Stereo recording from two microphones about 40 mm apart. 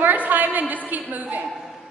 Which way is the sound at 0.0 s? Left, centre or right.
Right.